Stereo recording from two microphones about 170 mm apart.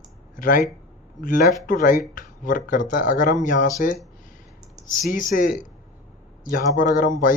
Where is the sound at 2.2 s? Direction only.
50° left (ahead or behind).